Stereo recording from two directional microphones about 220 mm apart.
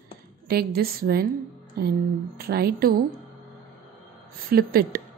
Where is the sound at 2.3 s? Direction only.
45° right (ahead or behind).